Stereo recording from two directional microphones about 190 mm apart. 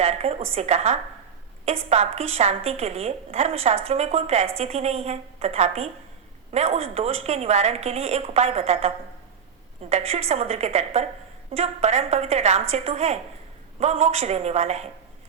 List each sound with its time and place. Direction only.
0.0 s a sound: 35° right (ahead or behind)
1.6 s a woman's voice: 35° right (ahead or behind)
9.9 s a woman's voice: 30° right (ahead or behind)